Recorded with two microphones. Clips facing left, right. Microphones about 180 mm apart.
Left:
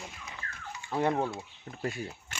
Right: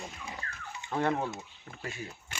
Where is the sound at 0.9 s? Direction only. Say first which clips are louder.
Left 1 dB; 15° left (ahead or behind).